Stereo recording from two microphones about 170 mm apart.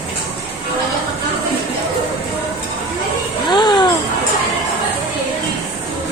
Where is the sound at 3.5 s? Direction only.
25° left (ahead or behind).